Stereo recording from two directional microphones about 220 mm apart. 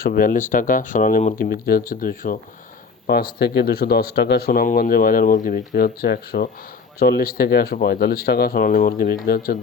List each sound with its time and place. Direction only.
0.0 s speech: 40° left (ahead or behind)